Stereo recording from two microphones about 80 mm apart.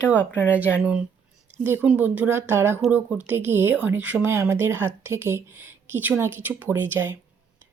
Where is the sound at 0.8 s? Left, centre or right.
Centre.